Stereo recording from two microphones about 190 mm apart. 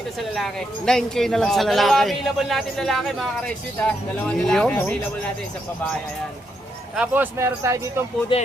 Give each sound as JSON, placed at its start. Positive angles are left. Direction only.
{"t": 0.2, "sound": "speech", "side_deg": 0}
{"t": 6.9, "sound": "speech", "side_deg": -5}
{"t": 8.3, "sound": "speech", "side_deg": 25}